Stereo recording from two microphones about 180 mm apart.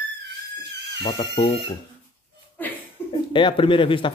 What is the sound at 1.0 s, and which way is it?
Speech, 25° left (ahead or behind).